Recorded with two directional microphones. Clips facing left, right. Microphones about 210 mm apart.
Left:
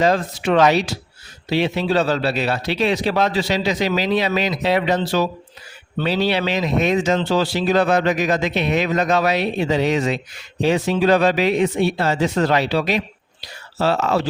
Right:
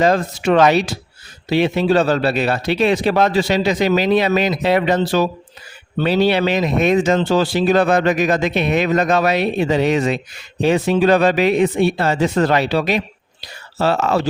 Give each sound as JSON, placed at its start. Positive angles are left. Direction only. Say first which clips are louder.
{"t": 0.0, "sound": "speech", "louder": "right 2 dB", "side_deg": -50}